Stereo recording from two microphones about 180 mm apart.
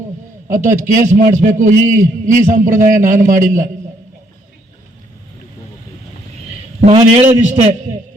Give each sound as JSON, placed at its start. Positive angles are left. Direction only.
{"t": 0.4, "sound": "a man's voice", "side_deg": -45}
{"t": 6.8, "sound": "a man's voice", "side_deg": -40}